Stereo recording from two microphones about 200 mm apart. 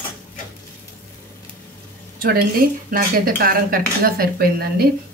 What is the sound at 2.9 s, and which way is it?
A woman's voice, 45° right (ahead or behind).